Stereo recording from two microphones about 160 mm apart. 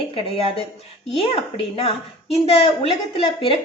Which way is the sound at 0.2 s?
35° left (ahead or behind).